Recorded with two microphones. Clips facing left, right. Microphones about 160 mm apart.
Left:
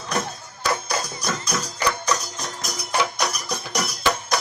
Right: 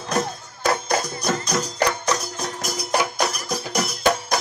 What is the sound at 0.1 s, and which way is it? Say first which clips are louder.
Music: right 3 dB; 40° right (ahead or behind).